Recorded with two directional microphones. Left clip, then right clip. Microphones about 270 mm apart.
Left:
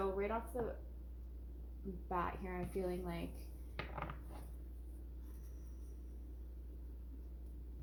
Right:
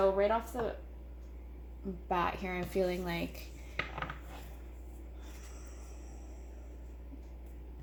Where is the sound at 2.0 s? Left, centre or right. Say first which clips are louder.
Right 8 dB; right.